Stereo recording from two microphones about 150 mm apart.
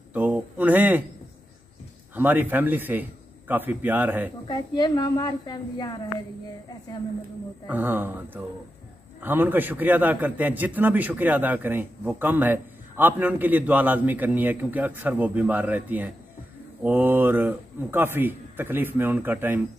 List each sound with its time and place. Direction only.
0.1 s a sound: 10° right (ahead or behind)
2.1 s a man's voice: 10° right (ahead or behind)
4.5 s a woman's voice: 30° left (ahead or behind)
7.6 s a man's voice: 15° right (ahead or behind)